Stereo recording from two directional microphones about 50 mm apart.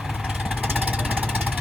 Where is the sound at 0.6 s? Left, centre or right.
Right.